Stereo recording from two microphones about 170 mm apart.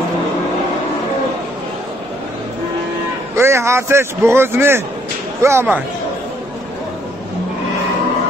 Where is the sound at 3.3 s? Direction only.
15° right (ahead or behind).